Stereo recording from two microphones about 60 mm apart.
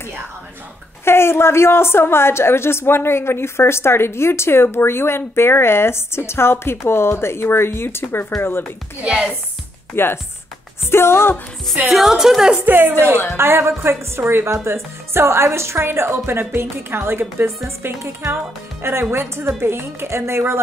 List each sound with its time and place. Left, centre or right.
1.0 s a woman's voice: left
9.0 s a woman's voice: centre
9.9 s a woman's voice: left
11.8 s a woman's voice: centre
12.5 s a woman's voice: right
13.4 s speech: right